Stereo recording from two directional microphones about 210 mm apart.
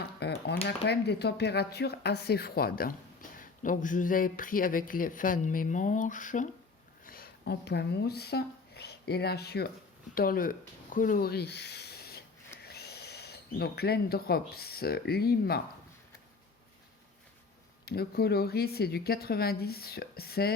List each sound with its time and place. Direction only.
0.2 s speech: 50° left (ahead or behind)
17.8 s speech: 50° left (ahead or behind)